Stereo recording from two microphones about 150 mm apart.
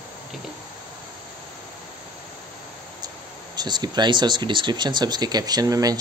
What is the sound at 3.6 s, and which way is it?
Speech, 30° right (ahead or behind).